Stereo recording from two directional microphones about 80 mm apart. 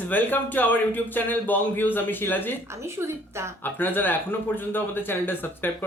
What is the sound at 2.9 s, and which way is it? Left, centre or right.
Speech, right.